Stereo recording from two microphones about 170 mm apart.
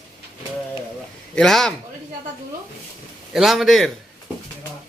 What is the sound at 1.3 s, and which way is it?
Speech, 5° left (ahead or behind).